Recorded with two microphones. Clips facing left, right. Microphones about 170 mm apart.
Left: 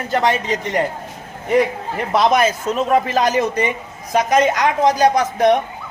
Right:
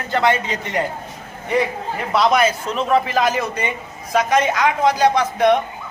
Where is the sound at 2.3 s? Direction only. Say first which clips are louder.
Left 1 dB; 40° left (ahead or behind).